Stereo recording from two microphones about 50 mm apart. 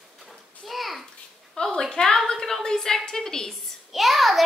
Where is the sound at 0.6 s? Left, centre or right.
Centre.